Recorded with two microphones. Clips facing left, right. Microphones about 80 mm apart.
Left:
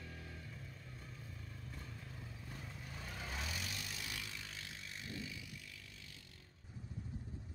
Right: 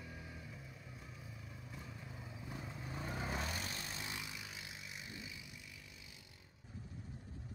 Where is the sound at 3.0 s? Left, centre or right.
Right.